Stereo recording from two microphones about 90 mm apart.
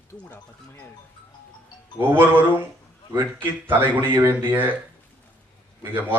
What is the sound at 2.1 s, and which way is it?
Speech, 25° right (ahead or behind).